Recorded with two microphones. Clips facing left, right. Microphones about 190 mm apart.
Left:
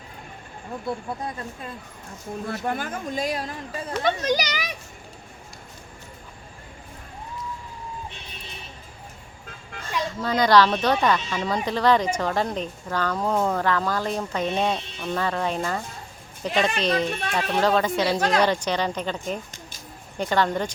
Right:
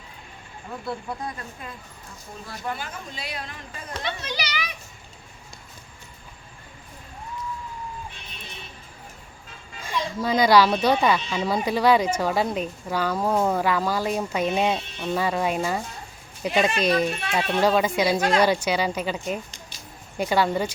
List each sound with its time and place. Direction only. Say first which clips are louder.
2.5 s speech: left 4 dB; 50° left (ahead or behind)
10.0 s speech: right 1 dB; 10° right (ahead or behind)